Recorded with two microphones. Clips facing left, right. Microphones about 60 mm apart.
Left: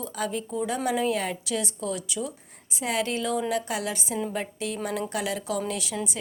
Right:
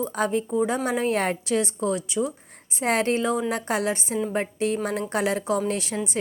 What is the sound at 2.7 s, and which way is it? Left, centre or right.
Speech, right.